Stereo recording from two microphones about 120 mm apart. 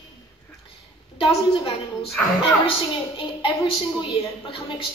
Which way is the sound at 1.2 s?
50° left (ahead or behind).